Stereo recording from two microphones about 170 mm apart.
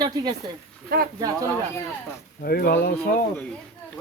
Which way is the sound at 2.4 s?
60° left (ahead or behind).